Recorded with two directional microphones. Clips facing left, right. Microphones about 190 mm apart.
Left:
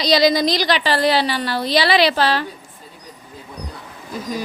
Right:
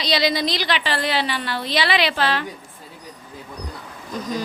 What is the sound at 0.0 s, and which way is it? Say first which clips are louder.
A woman's voice: left 6 dB; 40° left (ahead or behind).